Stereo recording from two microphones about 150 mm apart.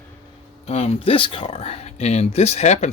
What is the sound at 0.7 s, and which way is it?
Speech, 45° left (ahead or behind).